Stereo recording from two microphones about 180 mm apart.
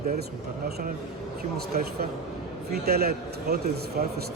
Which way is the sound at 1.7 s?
60° right (ahead or behind).